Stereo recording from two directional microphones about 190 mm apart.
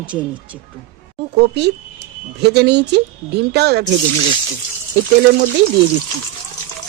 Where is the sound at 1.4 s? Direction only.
60° right (ahead or behind).